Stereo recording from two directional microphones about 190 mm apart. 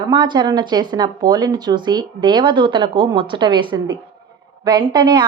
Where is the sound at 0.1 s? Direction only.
25° right (ahead or behind).